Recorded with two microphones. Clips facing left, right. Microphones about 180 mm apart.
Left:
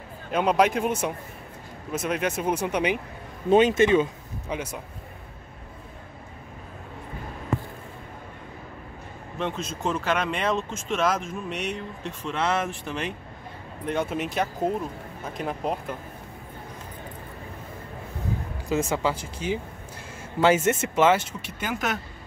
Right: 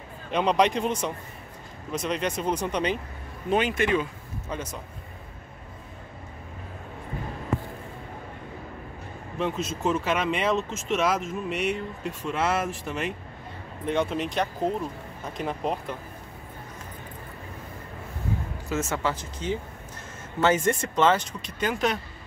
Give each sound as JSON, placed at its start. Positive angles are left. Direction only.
{"t": 0.3, "sound": "speech", "side_deg": 5}
{"t": 3.4, "sound": "speech", "side_deg": 25}
{"t": 9.4, "sound": "speech", "side_deg": -5}
{"t": 18.7, "sound": "speech", "side_deg": 15}